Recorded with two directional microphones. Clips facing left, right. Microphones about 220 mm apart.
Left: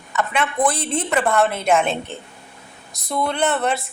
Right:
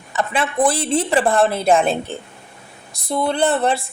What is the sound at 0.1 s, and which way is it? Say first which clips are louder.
A woman's voice: right 1 dB; 30° right (ahead or behind).